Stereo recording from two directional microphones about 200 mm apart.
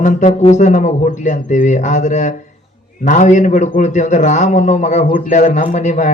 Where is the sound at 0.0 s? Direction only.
35° left (ahead or behind).